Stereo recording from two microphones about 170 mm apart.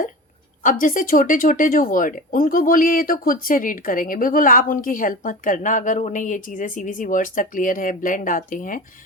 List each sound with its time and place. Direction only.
0.6 s speech: 50° left (ahead or behind)